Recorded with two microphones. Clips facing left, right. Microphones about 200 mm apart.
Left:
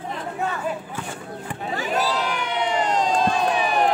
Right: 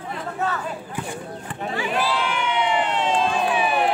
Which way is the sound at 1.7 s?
40° left (ahead or behind).